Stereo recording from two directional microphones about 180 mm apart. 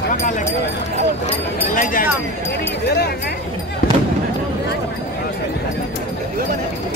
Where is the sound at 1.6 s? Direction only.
50° left (ahead or behind).